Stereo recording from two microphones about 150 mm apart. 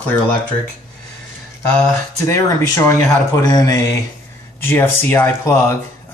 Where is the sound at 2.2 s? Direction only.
20° left (ahead or behind).